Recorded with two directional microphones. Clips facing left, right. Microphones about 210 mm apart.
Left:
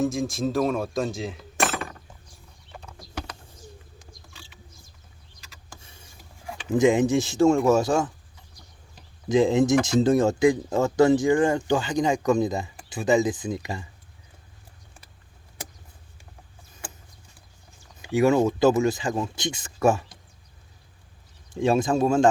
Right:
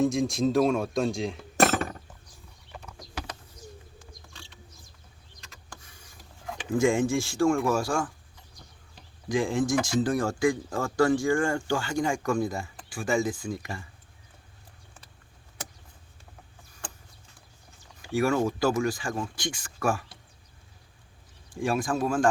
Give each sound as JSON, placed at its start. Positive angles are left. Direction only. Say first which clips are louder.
{"t": 0.0, "sound": "speech", "louder": "right 1 dB", "side_deg": 0}
{"t": 1.5, "sound": "chink", "louder": "right 4 dB", "side_deg": -40}
{"t": 4.3, "sound": "a sound", "louder": "even", "side_deg": 5}
{"t": 5.8, "sound": "a sound", "louder": "left 3 dB", "side_deg": 25}
{"t": 6.7, "sound": "speech", "louder": "left 4 dB", "side_deg": 20}
{"t": 9.3, "sound": "speech", "louder": "left 6 dB", "side_deg": 20}
{"t": 18.0, "sound": "speech", "louder": "left 5 dB", "side_deg": 20}
{"t": 21.5, "sound": "speech", "louder": "left 6 dB", "side_deg": 20}